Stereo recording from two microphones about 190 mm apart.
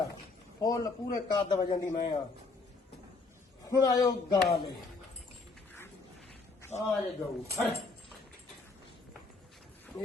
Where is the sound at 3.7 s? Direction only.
20° left (ahead or behind).